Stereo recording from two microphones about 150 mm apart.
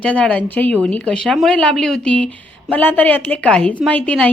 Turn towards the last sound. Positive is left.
turn(degrees=10)  # may be behind; listen again after turning